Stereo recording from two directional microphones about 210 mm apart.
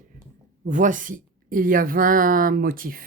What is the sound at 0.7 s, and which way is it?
A woman's voice, 40° right (ahead or behind).